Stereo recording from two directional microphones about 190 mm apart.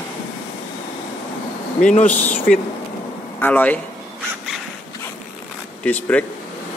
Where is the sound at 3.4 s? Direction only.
10° left (ahead or behind).